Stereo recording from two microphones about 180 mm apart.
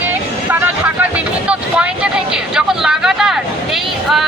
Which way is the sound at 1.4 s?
5° right (ahead or behind).